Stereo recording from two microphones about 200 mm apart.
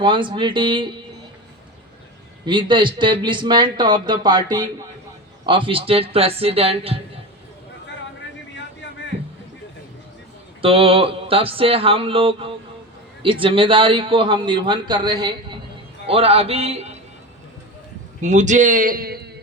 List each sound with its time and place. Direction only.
0.0 s a man's voice: 25° right (ahead or behind)
2.4 s a man's voice: 25° right (ahead or behind)
10.6 s a man's voice: 25° right (ahead or behind)
18.2 s a man's voice: 35° right (ahead or behind)